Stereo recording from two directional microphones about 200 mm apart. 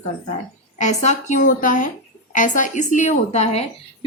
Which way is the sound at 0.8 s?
35° left (ahead or behind).